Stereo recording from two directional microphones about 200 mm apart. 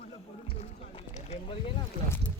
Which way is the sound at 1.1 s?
30° left (ahead or behind).